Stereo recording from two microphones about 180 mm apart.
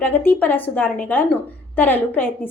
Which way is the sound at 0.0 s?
10° left (ahead or behind).